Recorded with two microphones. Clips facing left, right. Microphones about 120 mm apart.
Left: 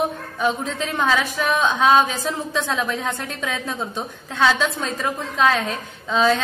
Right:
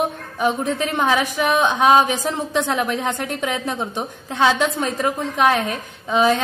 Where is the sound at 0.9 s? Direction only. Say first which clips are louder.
Even; 15° right (ahead or behind).